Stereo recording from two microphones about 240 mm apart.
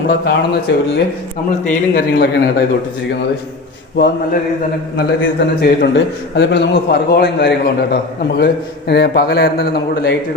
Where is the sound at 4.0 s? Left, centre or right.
Left.